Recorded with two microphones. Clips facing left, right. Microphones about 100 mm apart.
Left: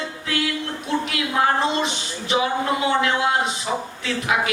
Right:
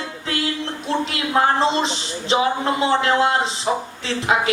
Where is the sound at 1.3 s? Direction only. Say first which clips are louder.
Right 3 dB; 30° right (ahead or behind).